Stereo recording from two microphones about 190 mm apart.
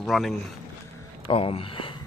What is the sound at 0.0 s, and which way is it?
Speech, centre (ahead or behind).